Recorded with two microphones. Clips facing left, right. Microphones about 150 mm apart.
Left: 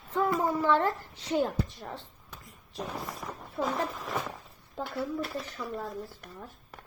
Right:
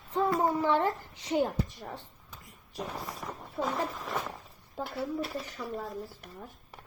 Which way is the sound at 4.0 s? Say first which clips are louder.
Left 1 dB; centre (ahead or behind).